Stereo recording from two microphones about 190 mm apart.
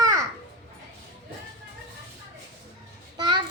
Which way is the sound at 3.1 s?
25° right (ahead or behind).